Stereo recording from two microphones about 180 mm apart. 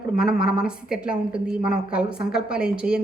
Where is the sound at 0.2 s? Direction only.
5° right (ahead or behind).